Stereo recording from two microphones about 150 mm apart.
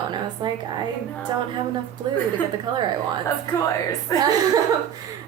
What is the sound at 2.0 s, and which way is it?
Speech, 30° right (ahead or behind).